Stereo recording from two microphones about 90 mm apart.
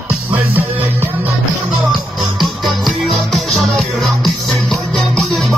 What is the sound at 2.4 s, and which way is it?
Music, centre (ahead or behind).